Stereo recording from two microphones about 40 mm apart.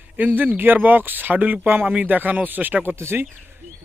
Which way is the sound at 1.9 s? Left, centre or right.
Right.